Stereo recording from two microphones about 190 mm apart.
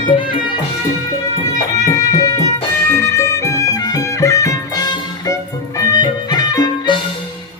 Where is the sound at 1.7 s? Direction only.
20° left (ahead or behind).